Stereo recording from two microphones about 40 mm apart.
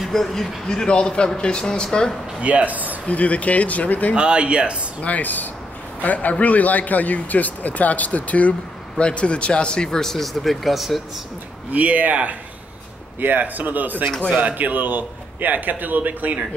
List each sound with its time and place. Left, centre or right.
0.0 s speech: centre
0.7 s speech: left
2.4 s speech: right
3.1 s speech: left
4.1 s speech: right
5.0 s a man's voice: left
8.9 s a man's voice: left; by 11.0 s centre
11.7 s a man's voice: right